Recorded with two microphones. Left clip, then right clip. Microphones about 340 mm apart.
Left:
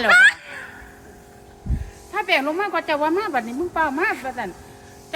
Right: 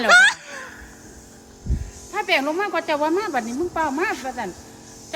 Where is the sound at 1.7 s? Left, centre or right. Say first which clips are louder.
Even; centre.